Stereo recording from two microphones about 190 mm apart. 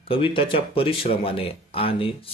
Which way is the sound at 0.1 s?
30° left (ahead or behind).